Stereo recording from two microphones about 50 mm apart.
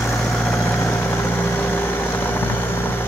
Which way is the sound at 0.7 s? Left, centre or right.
Left.